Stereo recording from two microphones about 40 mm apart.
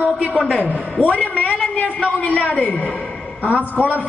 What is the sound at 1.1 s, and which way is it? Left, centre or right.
A man's voice, left.